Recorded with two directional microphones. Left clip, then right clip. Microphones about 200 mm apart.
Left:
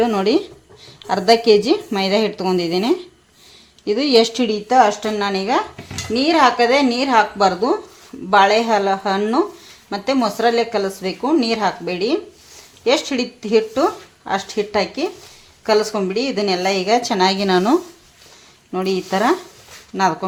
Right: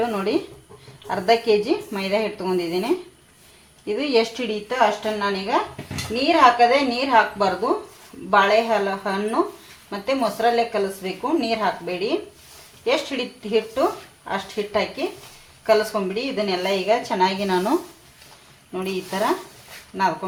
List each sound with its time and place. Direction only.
0.0 s a woman's voice: 50° left (ahead or behind)